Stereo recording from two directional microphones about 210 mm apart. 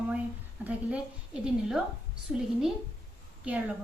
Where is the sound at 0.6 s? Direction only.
5° right (ahead or behind).